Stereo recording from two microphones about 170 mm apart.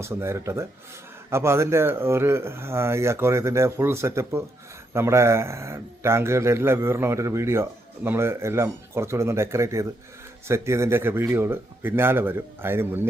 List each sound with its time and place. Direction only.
0.0 s speech: 15° right (ahead or behind)